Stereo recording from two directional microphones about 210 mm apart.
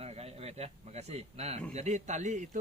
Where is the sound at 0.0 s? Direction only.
30° right (ahead or behind).